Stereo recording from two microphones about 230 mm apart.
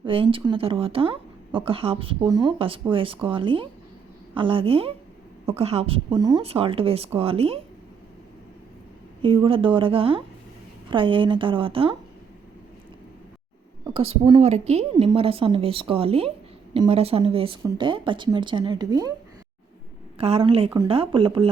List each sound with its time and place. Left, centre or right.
0.0 s speech: right
9.2 s speech: right
13.8 s speech: right
20.1 s speech: right